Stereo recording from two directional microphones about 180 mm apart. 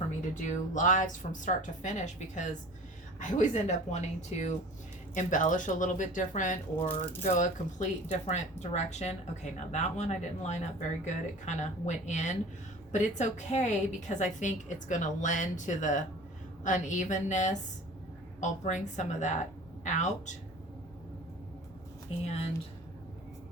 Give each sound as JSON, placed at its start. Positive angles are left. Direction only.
{"t": 0.3, "sound": "a woman's voice", "side_deg": 45}
{"t": 6.8, "sound": "speech", "side_deg": 10}
{"t": 7.2, "sound": "a woman's voice", "side_deg": 40}
{"t": 22.2, "sound": "speech", "side_deg": 35}